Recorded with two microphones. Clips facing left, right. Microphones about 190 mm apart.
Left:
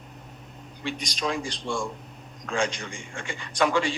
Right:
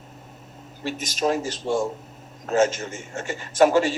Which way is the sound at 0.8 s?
45° right (ahead or behind).